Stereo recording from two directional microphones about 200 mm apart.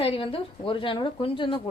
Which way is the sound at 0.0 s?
25° left (ahead or behind).